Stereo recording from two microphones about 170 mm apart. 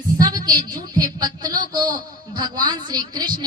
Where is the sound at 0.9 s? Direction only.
25° right (ahead or behind).